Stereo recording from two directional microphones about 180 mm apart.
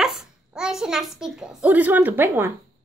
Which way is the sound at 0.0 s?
Centre (ahead or behind).